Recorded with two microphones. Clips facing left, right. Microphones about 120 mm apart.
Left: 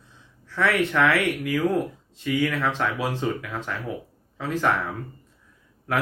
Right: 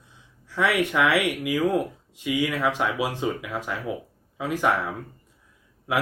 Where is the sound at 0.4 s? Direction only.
15° right (ahead or behind).